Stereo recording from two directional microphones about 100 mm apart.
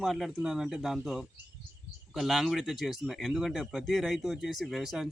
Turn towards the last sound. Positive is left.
turn(degrees=-5)  # may be behind; listen again after turning